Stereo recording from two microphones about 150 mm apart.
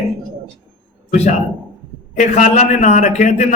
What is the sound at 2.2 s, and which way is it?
Music, 50° left (ahead or behind).